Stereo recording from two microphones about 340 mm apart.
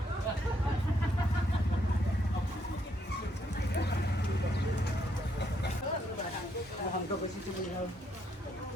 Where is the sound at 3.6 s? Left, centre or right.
Left.